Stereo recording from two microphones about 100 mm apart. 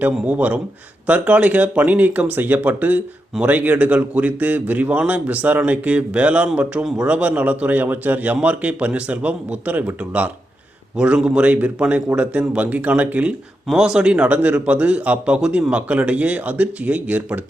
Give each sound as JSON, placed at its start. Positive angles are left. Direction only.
{"t": 0.0, "sound": "a man's voice", "side_deg": -15}